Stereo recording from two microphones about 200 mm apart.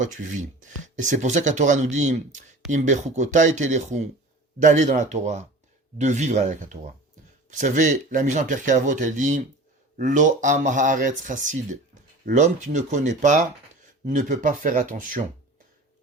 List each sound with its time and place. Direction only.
0.6 s speech: 40° right (ahead or behind)